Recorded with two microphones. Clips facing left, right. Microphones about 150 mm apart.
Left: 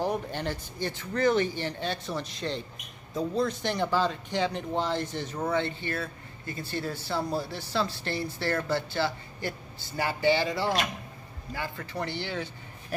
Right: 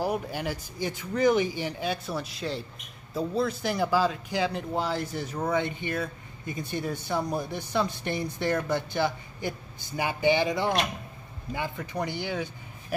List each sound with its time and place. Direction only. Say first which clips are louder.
0.0 s speech: right 1 dB; 10° right (ahead or behind)